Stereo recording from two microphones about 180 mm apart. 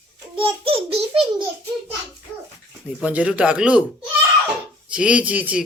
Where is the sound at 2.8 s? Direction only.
10° right (ahead or behind).